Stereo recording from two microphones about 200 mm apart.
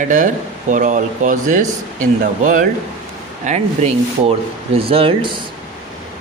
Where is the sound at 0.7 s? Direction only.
40° right (ahead or behind).